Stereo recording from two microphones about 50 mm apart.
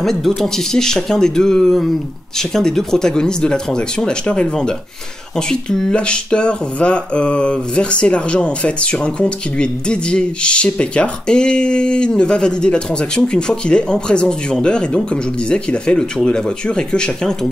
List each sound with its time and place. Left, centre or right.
0.0 s speech: centre